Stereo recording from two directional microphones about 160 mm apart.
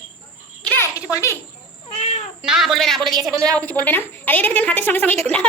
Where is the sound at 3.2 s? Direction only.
5° left (ahead or behind).